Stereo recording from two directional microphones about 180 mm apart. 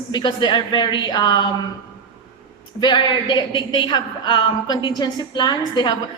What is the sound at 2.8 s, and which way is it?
A woman's voice, 25° left (ahead or behind).